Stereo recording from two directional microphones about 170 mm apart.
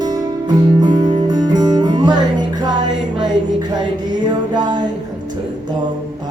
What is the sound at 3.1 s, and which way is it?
Music, 25° right (ahead or behind).